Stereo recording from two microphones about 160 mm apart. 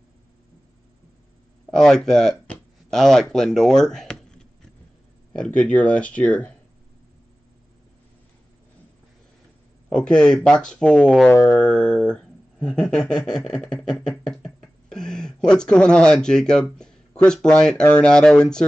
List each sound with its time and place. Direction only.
1.8 s speech: 5° left (ahead or behind)
5.9 s speech: 10° left (ahead or behind)
9.8 s speech: 5° left (ahead or behind)
11.5 s a sound: 5° left (ahead or behind)